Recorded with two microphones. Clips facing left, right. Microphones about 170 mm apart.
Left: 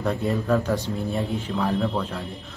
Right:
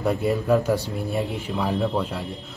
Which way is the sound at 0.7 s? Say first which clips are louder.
Left 1 dB; 20° left (ahead or behind).